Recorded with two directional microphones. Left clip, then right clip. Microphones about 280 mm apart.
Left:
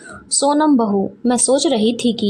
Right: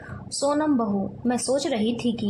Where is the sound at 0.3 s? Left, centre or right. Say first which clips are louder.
Left 8 dB; left.